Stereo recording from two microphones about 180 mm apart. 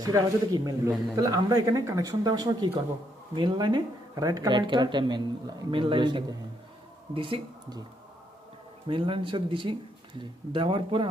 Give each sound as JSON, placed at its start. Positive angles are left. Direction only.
{"t": 0.0, "sound": "speech", "side_deg": -20}
{"t": 8.9, "sound": "speech", "side_deg": -30}